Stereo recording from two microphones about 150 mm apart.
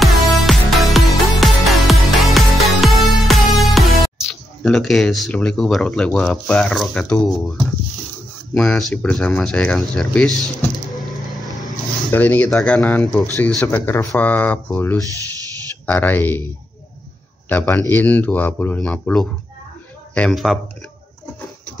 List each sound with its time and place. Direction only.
0.0 s music: centre (ahead or behind)
4.3 s speech: centre (ahead or behind)
8.5 s a man's voice: 5° left (ahead or behind)
9.9 s a sound: 5° left (ahead or behind)
12.1 s a man's voice: 10° left (ahead or behind)
17.5 s a man's voice: 10° left (ahead or behind)